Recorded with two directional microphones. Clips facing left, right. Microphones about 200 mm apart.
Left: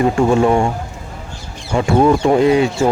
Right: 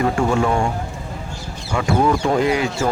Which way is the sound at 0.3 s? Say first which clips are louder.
Left 5 dB; 25° left (ahead or behind).